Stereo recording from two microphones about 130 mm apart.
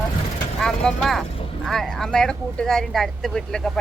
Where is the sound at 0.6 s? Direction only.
5° left (ahead or behind).